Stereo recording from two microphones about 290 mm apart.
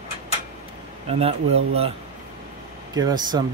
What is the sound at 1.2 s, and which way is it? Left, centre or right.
Speech, right.